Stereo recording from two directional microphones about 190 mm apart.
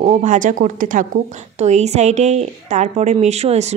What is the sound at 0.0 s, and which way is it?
A woman's voice, 35° right (ahead or behind).